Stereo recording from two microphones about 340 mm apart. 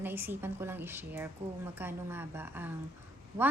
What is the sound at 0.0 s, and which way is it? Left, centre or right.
A woman's voice, centre.